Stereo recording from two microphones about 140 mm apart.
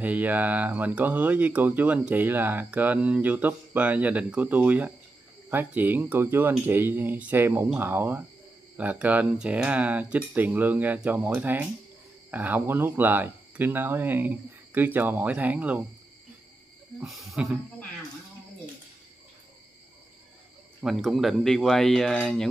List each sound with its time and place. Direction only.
0.0 s speech: 10° right (ahead or behind)
17.0 s speech: centre (ahead or behind)
20.8 s speech: centre (ahead or behind)